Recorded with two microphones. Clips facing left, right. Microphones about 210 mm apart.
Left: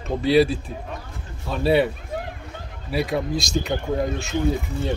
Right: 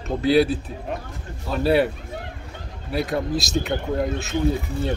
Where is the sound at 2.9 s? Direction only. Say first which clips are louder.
Even; centre (ahead or behind).